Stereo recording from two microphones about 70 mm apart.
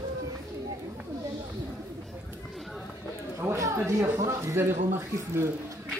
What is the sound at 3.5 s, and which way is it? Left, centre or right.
Speech, right.